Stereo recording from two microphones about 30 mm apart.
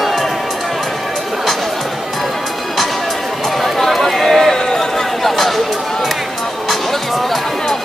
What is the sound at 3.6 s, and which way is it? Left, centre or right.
Run, centre.